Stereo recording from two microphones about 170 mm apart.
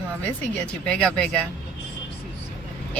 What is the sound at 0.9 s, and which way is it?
Speech, 5° left (ahead or behind).